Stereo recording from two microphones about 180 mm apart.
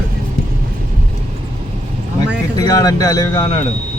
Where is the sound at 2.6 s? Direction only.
20° left (ahead or behind).